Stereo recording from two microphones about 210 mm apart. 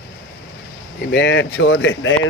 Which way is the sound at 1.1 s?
55° left (ahead or behind).